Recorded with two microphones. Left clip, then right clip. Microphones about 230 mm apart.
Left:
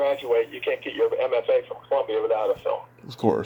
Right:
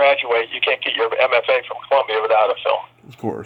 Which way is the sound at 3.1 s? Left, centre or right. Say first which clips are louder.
Left 5 dB; centre.